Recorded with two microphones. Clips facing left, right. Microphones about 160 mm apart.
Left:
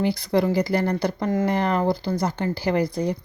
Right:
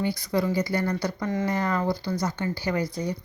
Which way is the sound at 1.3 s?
50° left (ahead or behind).